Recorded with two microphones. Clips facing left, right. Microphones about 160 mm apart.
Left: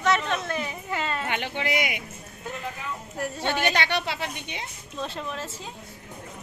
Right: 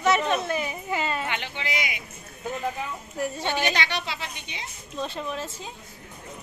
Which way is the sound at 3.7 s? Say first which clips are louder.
Left 2 dB; 55° left (ahead or behind).